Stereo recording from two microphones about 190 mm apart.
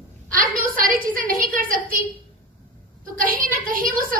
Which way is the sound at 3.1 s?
45° right (ahead or behind).